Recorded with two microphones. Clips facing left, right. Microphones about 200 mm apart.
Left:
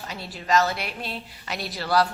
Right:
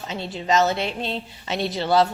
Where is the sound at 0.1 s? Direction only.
25° right (ahead or behind).